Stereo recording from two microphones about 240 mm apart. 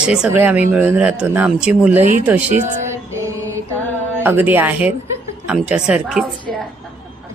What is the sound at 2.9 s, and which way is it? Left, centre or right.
Music, centre.